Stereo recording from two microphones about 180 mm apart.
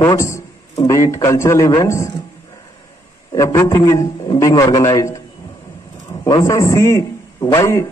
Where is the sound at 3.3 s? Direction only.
15° left (ahead or behind).